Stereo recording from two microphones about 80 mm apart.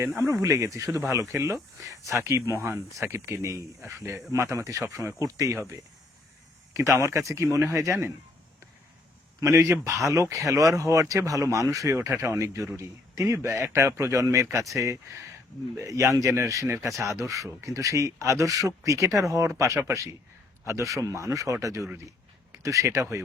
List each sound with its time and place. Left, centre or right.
0.2 s speech: right
9.4 s speech: right
11.9 s speech: right